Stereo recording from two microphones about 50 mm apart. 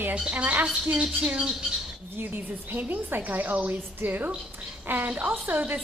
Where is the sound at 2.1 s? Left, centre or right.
Right.